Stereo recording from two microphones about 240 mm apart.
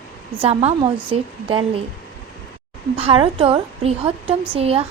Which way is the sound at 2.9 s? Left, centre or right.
Right.